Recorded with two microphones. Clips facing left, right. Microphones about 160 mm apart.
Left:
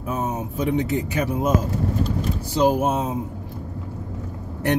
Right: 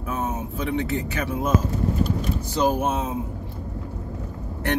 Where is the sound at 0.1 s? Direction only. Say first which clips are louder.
Left 2 dB; 15° left (ahead or behind).